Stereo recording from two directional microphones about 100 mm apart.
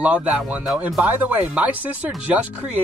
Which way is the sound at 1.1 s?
15° right (ahead or behind).